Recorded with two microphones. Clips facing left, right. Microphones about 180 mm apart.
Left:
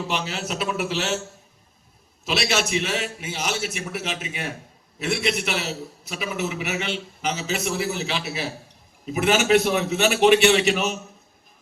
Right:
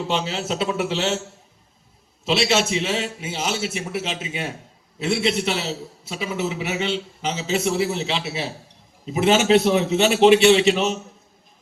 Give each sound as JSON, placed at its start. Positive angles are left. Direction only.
{"t": 0.1, "sound": "a man's voice", "side_deg": -25}
{"t": 2.2, "sound": "a man's voice", "side_deg": -25}